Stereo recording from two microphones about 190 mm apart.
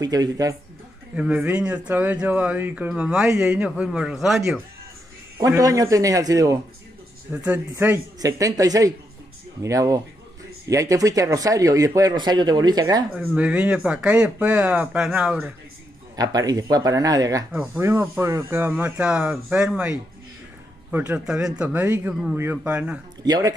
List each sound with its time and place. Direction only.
0.0 s speech: 20° right (ahead or behind)
1.1 s a man's voice: 5° right (ahead or behind)
5.4 s speech: 20° right (ahead or behind)
13.1 s speech: 5° right (ahead or behind)
16.2 s speech: 20° right (ahead or behind)
23.2 s speech: 20° right (ahead or behind)